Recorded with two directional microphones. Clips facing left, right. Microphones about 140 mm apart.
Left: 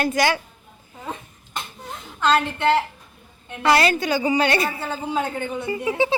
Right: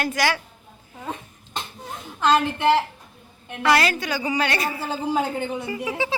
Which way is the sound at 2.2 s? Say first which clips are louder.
Right 1 dB; 10° right (ahead or behind).